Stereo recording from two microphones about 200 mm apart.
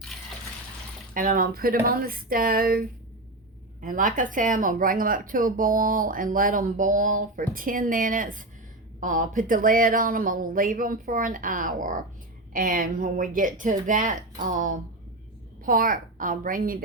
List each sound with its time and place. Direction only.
1.1 s speech: 45° right (ahead or behind)